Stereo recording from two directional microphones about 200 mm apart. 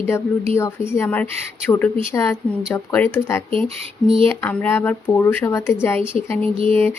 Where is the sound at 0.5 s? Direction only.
15° left (ahead or behind).